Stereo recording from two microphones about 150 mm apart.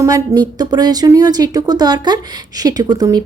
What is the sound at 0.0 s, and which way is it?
A woman's voice, 25° right (ahead or behind).